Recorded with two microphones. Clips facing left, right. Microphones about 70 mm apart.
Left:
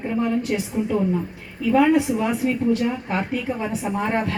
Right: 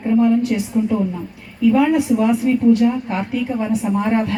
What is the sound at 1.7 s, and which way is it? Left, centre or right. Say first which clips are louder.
A woman's voice: left 1 dB; left.